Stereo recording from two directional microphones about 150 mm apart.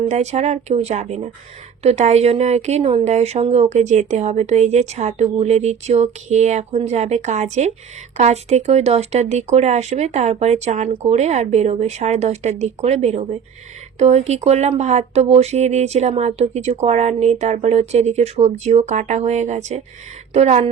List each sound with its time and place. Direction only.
0.1 s speech: 50° right (ahead or behind)